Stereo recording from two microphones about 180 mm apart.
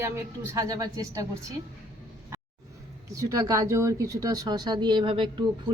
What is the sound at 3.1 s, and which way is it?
Speech, 20° right (ahead or behind).